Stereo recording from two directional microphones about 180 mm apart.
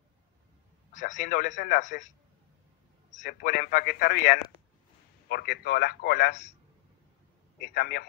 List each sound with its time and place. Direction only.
0.9 s a man's voice: 45° left (ahead or behind); by 6.3 s 60° left (ahead or behind)
7.6 s speech: 60° left (ahead or behind)